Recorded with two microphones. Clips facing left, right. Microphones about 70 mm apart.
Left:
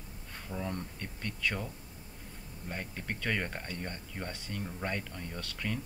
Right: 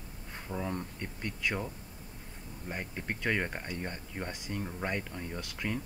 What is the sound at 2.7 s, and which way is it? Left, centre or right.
Speech, centre.